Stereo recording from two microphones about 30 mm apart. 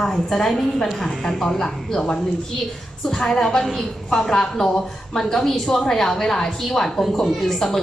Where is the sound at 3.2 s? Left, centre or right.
Left.